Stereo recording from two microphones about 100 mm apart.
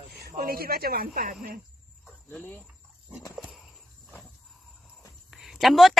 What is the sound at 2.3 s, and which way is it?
Speech, 15° left (ahead or behind).